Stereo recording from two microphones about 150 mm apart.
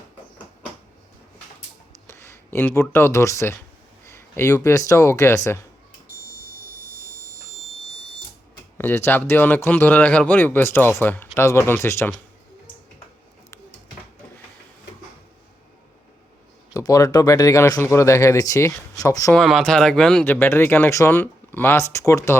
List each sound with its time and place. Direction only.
2.0 s speech: 15° left (ahead or behind)
8.8 s speech: 15° left (ahead or behind)
16.7 s speech: 25° left (ahead or behind)
19.3 s speech: centre (ahead or behind); by 22.4 s 20° left (ahead or behind)